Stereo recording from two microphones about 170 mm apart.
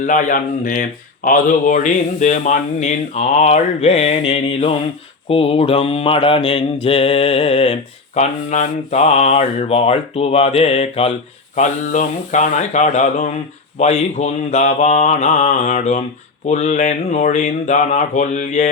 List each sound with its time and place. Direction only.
0.0 s speech: 50° left (ahead or behind)
5.3 s mantra: 35° left (ahead or behind)
11.5 s speech: 45° left (ahead or behind)